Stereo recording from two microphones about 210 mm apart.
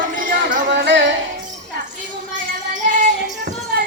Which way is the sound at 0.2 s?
45° right (ahead or behind).